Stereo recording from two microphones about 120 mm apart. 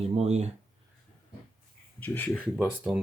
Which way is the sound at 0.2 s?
65° right (ahead or behind).